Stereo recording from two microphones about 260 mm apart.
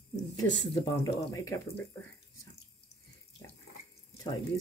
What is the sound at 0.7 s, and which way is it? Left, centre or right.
Speech, centre.